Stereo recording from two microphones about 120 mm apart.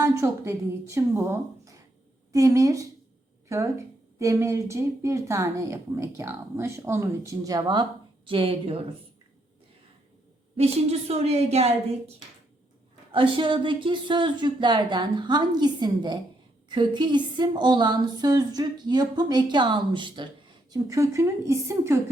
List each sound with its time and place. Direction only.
0.0 s speech: 20° right (ahead or behind); by 8.8 s 50° right (ahead or behind)
11.1 s speech: 60° right (ahead or behind)
13.1 s a woman's voice: 45° right (ahead or behind)
20.7 s speech: 30° right (ahead or behind)